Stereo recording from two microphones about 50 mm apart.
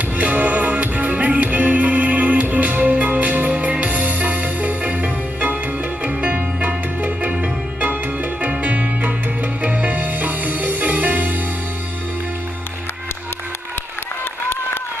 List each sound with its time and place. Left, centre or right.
0.2 s music: right